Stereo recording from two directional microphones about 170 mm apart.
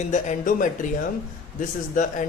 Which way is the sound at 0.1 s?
50° left (ahead or behind).